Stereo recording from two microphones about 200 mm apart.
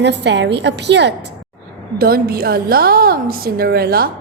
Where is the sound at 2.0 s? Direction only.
50° right (ahead or behind).